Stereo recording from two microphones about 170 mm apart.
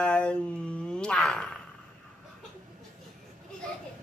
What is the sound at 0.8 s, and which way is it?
Fart, 5° left (ahead or behind).